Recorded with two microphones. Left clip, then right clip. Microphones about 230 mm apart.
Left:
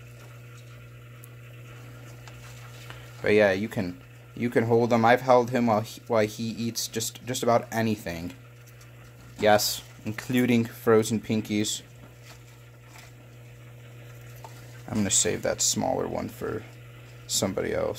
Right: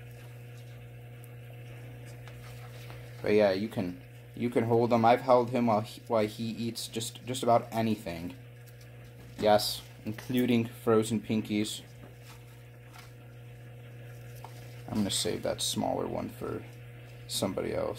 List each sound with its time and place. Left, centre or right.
3.3 s speech: left
9.4 s speech: left
14.9 s speech: left